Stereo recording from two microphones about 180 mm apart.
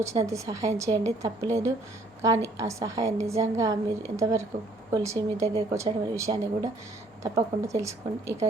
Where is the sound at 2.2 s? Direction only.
15° right (ahead or behind).